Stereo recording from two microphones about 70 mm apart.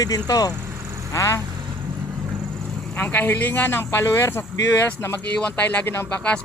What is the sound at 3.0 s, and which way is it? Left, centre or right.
Speech, left.